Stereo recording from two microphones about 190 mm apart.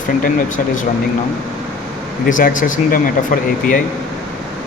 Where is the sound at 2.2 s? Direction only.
45° left (ahead or behind).